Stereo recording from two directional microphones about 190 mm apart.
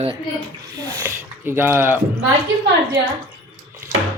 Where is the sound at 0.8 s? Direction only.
15° right (ahead or behind).